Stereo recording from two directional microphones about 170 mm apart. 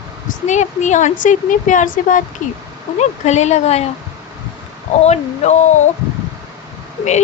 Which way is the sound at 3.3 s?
40° left (ahead or behind).